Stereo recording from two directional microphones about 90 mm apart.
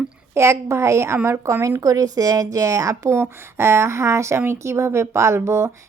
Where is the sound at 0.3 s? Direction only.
30° right (ahead or behind).